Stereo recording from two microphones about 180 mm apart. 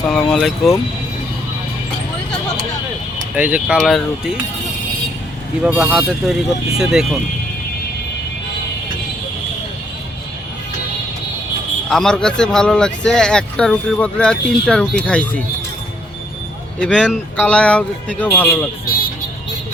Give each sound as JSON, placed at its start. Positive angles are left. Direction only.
{"t": 0.0, "sound": "speech", "side_deg": 5}
{"t": 3.3, "sound": "speech", "side_deg": -10}
{"t": 5.6, "sound": "speech", "side_deg": -5}
{"t": 11.9, "sound": "speech", "side_deg": 5}
{"t": 16.8, "sound": "a man's voice", "side_deg": 0}